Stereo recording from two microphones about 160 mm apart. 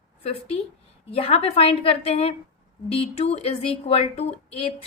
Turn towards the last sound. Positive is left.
turn(degrees=40)  # may be behind; listen again after turning